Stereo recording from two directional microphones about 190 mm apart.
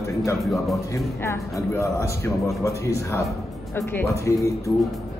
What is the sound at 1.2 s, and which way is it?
A woman's voice, 15° left (ahead or behind).